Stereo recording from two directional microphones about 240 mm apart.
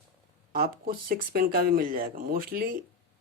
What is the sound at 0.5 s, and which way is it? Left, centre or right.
Speech, right.